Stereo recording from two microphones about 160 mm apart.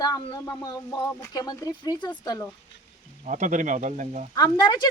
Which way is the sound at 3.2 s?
50° right (ahead or behind).